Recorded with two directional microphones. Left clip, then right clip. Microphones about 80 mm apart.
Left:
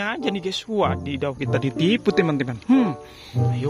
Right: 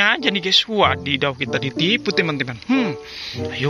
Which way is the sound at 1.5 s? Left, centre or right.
Left.